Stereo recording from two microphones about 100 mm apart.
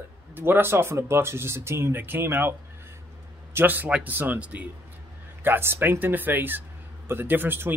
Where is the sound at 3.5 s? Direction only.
20° right (ahead or behind).